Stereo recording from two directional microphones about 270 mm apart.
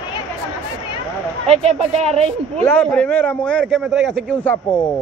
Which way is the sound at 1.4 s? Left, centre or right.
Right.